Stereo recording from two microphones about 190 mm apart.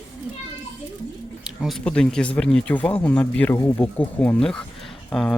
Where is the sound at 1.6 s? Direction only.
5° left (ahead or behind).